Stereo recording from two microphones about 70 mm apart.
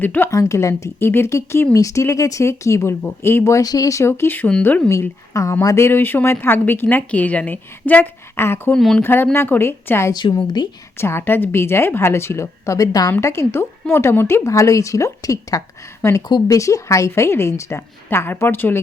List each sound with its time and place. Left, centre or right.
0.0 s speech: left
0.3 s a woman's voice: left
3.6 s a woman's voice: left
4.9 s a woman's voice: left
8.4 s a woman's voice: left
10.1 s a woman's voice: left
10.9 s a woman's voice: left
13.2 s a woman's voice: left
16.0 s a woman's voice: left